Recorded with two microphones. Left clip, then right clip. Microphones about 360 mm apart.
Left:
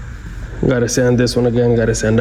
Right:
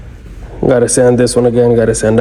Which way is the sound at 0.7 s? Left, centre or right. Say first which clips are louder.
Right 6 dB; centre.